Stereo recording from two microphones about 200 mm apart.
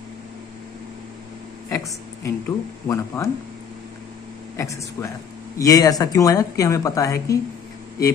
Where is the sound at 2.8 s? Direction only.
15° left (ahead or behind).